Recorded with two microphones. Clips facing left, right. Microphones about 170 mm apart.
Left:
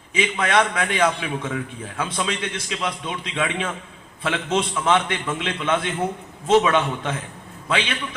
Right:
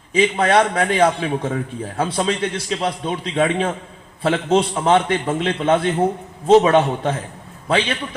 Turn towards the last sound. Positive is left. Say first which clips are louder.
# right 5 dB
turn(degrees=-35)  # may be behind; listen again after turning